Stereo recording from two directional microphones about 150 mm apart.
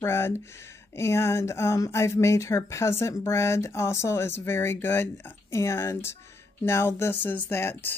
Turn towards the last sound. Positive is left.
turn(degrees=15)  # may be behind; listen again after turning